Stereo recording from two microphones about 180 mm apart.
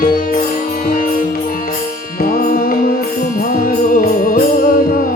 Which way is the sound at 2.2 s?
50° left (ahead or behind).